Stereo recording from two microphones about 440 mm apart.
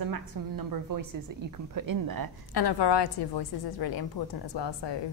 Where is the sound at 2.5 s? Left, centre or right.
Left.